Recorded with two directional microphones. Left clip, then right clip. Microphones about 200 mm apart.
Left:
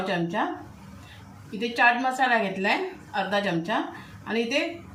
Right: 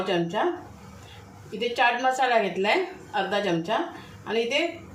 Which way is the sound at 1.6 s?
25° right (ahead or behind).